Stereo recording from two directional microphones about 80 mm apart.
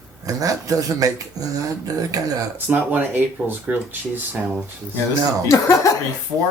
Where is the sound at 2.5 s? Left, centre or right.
Right.